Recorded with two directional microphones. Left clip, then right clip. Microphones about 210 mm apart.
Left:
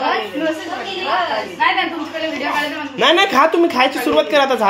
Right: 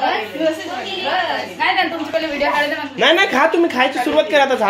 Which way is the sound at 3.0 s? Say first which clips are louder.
Left 1 dB; 15° left (ahead or behind).